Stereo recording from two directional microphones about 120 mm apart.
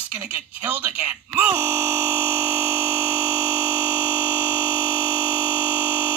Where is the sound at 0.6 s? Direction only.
15° right (ahead or behind).